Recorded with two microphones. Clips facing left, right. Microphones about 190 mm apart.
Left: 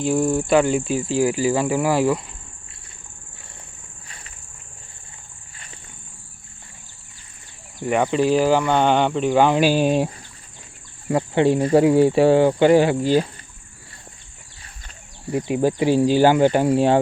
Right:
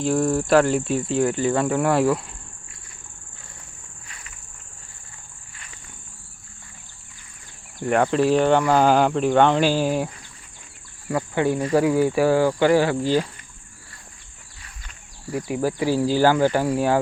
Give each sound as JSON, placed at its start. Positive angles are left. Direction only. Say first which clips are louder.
{"t": 0.0, "sound": "speech", "louder": "left 1 dB", "side_deg": 0}
{"t": 7.8, "sound": "speech", "louder": "even", "side_deg": 5}
{"t": 11.1, "sound": "speech", "louder": "left 4 dB", "side_deg": 25}
{"t": 15.3, "sound": "speech", "louder": "left 4 dB", "side_deg": 25}